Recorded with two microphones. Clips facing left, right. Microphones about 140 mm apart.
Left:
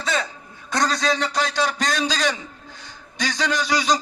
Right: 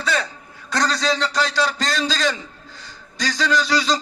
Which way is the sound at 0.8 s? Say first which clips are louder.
Right 1 dB; 90° right.